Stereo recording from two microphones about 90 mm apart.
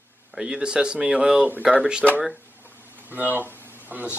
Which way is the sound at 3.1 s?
20° right (ahead or behind).